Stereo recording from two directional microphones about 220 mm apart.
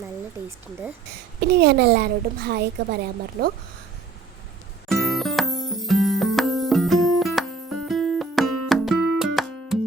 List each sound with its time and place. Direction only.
1.4 s a woman's voice: 45° right (ahead or behind)
4.9 s music: centre (ahead or behind)